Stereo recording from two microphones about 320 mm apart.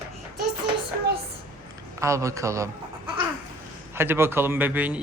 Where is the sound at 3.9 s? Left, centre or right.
Centre.